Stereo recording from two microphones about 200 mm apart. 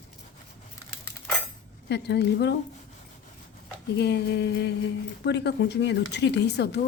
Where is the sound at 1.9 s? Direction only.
60° left (ahead or behind).